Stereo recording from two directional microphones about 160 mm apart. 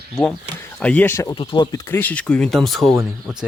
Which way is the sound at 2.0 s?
10° left (ahead or behind).